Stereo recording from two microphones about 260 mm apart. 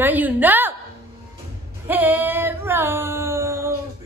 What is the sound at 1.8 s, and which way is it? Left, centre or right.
Female singing, centre.